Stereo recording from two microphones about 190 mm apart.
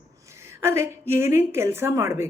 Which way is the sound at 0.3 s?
15° right (ahead or behind).